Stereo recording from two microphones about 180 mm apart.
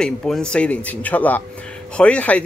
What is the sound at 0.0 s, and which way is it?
Speech, 5° left (ahead or behind).